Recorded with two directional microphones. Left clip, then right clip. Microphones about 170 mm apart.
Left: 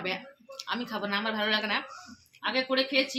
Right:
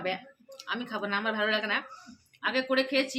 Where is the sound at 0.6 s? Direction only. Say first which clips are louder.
Even; 40° left (ahead or behind).